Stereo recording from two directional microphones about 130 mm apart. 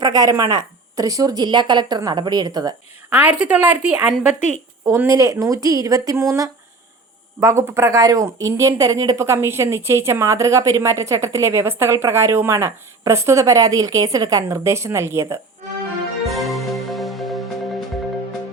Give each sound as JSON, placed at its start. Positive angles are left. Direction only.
{"t": 0.0, "sound": "speech", "side_deg": -25}
{"t": 3.1, "sound": "speech", "side_deg": -10}
{"t": 4.9, "sound": "speech", "side_deg": -20}
{"t": 16.2, "sound": "music", "side_deg": 0}